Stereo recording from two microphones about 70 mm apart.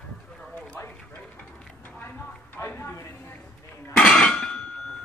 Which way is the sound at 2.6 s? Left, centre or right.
Left.